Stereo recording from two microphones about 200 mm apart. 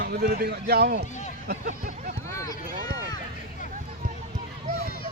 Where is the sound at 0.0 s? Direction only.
50° right (ahead or behind).